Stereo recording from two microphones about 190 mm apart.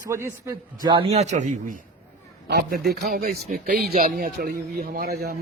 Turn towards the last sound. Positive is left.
turn(degrees=-55)  # may be behind; listen again after turning